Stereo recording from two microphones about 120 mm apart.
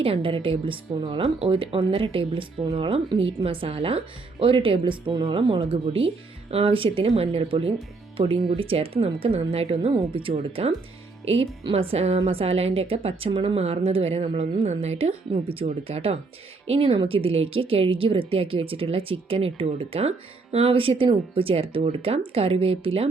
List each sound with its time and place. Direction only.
0.0 s a woman's voice: 50° right (ahead or behind)
15.3 s a woman's voice: 50° right (ahead or behind)